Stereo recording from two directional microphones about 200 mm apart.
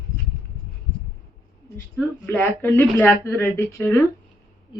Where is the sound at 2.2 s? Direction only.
10° left (ahead or behind).